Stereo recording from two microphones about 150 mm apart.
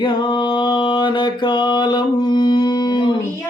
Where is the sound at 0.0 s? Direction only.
30° left (ahead or behind).